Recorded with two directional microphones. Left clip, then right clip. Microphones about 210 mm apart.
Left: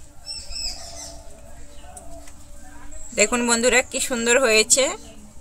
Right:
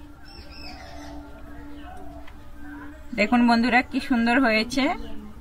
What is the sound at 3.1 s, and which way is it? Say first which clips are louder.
A woman's voice: left 1 dB; 55° left (ahead or behind).